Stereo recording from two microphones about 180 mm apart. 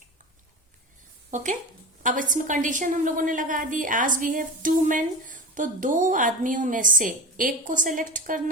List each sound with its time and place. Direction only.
1.3 s a woman's voice: 40° right (ahead or behind)